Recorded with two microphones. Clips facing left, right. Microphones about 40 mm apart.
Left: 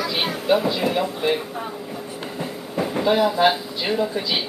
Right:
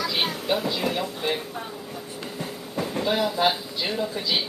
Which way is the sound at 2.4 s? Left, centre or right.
Centre.